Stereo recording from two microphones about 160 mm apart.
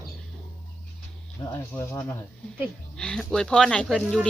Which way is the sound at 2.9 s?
5° left (ahead or behind).